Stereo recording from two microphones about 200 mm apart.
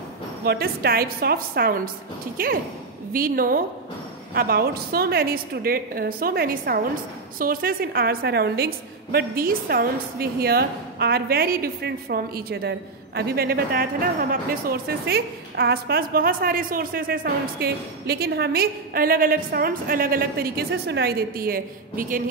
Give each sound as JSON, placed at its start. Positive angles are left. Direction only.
{"t": 0.5, "sound": "a woman's voice", "side_deg": -50}